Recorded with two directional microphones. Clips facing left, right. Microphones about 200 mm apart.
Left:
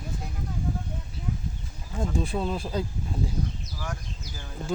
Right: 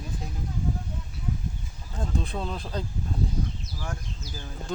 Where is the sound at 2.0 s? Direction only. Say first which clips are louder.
Left 3 dB; 5° left (ahead or behind).